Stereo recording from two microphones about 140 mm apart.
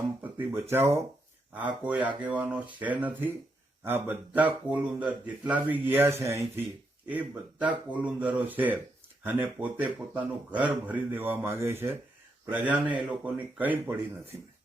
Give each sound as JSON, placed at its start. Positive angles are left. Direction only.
{"t": 0.2, "sound": "speech", "side_deg": -15}